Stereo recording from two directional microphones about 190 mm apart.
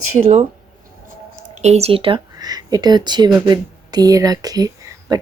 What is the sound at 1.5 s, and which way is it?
Speech, 35° right (ahead or behind).